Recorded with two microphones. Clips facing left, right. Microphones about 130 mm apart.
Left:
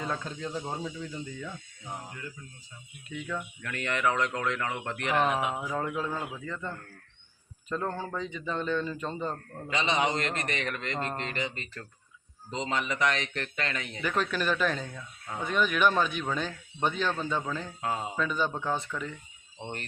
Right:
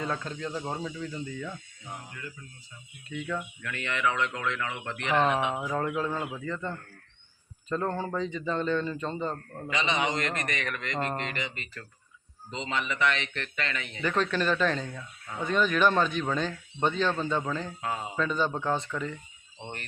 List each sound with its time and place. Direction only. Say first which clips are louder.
0.0 s speech: right 1 dB; 10° left (ahead or behind)
3.1 s a man's voice: right 2 dB; centre (ahead or behind)
3.6 s a man's voice: left 2 dB; 40° left (ahead or behind)
5.1 s a man's voice: right 2 dB; 5° left (ahead or behind)
9.6 s a man's voice: left 1 dB; 35° left (ahead or behind)
14.0 s a man's voice: right 2 dB; 5° left (ahead or behind)